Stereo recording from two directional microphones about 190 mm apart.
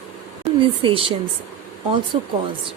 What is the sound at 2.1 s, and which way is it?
Speech, 30° right (ahead or behind).